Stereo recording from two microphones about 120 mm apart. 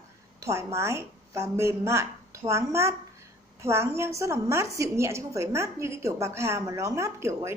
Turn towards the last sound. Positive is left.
turn(degrees=-25)  # may be behind; listen again after turning